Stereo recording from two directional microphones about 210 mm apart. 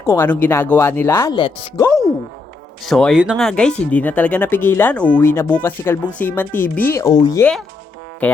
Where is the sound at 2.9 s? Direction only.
Centre (ahead or behind).